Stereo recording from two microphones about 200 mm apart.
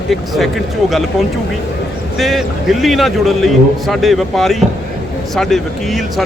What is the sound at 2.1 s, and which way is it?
Speech, centre (ahead or behind).